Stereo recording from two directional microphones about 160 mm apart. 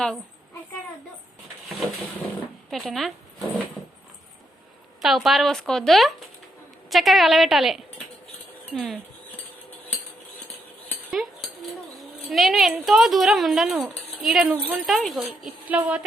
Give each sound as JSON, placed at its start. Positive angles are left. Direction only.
{"t": 2.6, "sound": "speech", "side_deg": 0}
{"t": 4.9, "sound": "speech", "side_deg": 0}
{"t": 8.7, "sound": "a sound", "side_deg": 0}
{"t": 11.1, "sound": "cutlery", "side_deg": 0}
{"t": 11.9, "sound": "speech", "side_deg": 0}